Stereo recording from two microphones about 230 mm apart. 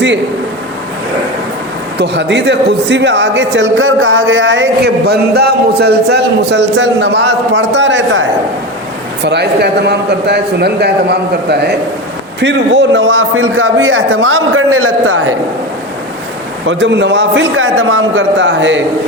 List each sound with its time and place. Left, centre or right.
2.0 s a man's voice: right
9.2 s a man's voice: right
16.6 s a man's voice: right